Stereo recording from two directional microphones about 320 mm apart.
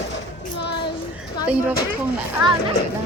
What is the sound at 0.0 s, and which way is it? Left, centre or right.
Child singing, left.